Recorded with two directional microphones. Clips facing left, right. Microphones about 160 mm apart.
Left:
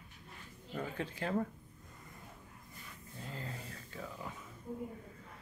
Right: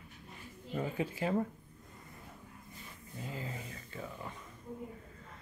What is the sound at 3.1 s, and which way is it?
Speech, 5° right (ahead or behind).